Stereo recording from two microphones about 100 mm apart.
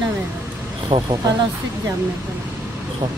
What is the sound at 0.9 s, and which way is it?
Speech, 55° right (ahead or behind).